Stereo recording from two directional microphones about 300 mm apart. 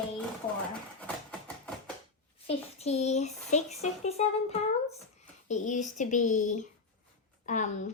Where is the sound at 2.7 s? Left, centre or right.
Left.